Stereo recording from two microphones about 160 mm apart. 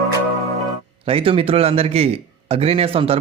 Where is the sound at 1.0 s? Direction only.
35° right (ahead or behind).